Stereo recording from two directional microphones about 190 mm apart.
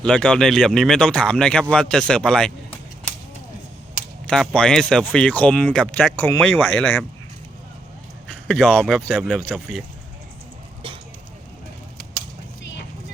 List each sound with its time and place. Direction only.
0.0 s speech: 5° left (ahead or behind)
4.3 s speech: 5° left (ahead or behind)
8.4 s speech: centre (ahead or behind)
10.8 s rodents: 25° right (ahead or behind)